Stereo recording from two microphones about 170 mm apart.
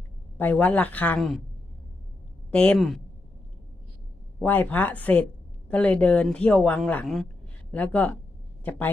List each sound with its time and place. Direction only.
0.4 s speech: 10° left (ahead or behind)
2.5 s a woman's voice: 5° left (ahead or behind)
4.4 s speech: 10° left (ahead or behind)